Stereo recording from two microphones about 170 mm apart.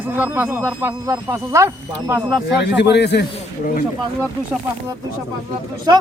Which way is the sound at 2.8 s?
85° left.